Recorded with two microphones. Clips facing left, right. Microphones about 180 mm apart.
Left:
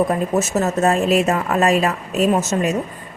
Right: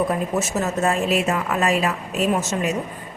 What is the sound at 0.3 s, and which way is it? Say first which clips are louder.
A woman's voice: left 4 dB; 45° left (ahead or behind).